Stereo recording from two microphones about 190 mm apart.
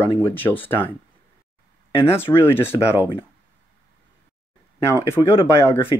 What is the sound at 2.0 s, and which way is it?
Speech, 10° left (ahead or behind).